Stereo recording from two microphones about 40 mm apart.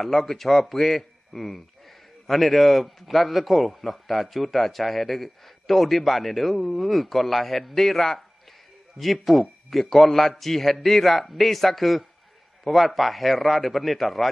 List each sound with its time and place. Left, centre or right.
0.0 s speech: centre